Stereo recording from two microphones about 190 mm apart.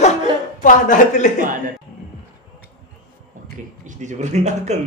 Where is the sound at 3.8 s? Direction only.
40° right (ahead or behind).